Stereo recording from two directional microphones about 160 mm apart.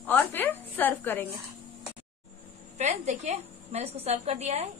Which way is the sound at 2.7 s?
45° right (ahead or behind).